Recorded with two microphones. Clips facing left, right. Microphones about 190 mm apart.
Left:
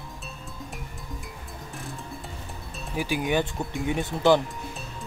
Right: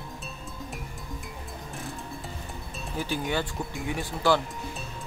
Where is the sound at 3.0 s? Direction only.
15° left (ahead or behind).